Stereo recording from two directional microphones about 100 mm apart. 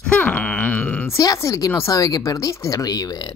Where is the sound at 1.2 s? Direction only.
35° left (ahead or behind).